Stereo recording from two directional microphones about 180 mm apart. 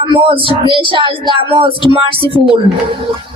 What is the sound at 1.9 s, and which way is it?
Music, 30° right (ahead or behind).